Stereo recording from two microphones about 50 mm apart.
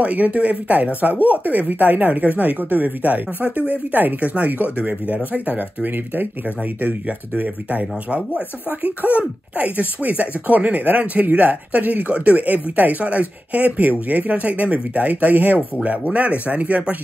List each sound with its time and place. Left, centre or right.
0.0 s speech: right
5.9 s speech: right